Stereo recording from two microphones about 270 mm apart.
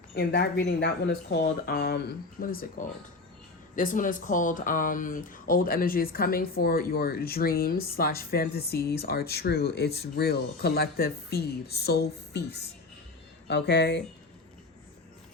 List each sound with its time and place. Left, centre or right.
0.1 s speech: left